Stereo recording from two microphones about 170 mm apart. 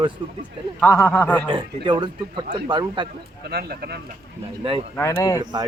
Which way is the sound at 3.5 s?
65° right (ahead or behind).